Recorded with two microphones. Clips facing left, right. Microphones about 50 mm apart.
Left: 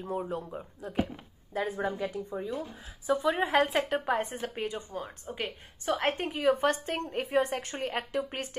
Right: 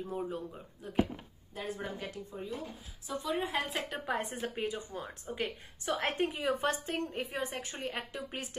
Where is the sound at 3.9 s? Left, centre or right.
Left.